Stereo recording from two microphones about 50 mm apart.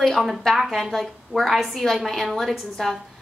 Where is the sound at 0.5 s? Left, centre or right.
Centre.